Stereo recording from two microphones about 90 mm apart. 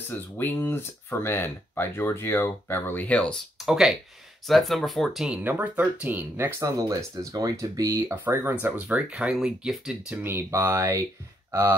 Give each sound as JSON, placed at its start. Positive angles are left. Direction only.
{"t": 0.1, "sound": "speech", "side_deg": 20}
{"t": 3.5, "sound": "speech", "side_deg": 0}
{"t": 5.4, "sound": "speech", "side_deg": -20}
{"t": 6.6, "sound": "speech", "side_deg": -35}
{"t": 8.1, "sound": "speech", "side_deg": -25}
{"t": 8.7, "sound": "speech", "side_deg": -15}
{"t": 10.2, "sound": "speech", "side_deg": -30}